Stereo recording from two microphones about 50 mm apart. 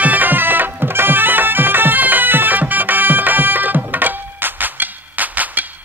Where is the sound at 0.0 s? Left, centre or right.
Right.